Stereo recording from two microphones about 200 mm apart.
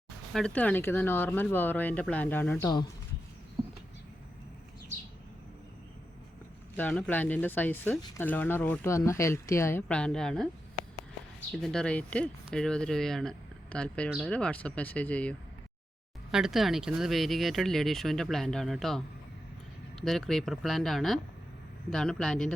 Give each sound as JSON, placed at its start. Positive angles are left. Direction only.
{"t": 0.3, "sound": "speech", "side_deg": 5}
{"t": 3.6, "sound": "a sound", "side_deg": -20}
{"t": 6.7, "sound": "speech", "side_deg": 10}
{"t": 11.6, "sound": "speech", "side_deg": 5}